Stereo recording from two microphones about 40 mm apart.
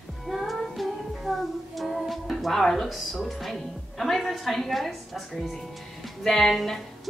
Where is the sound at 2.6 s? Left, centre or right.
Centre.